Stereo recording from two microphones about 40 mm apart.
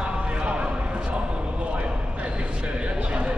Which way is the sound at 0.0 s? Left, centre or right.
Right.